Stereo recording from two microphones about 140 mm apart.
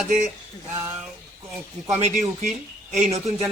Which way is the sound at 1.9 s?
55° right (ahead or behind).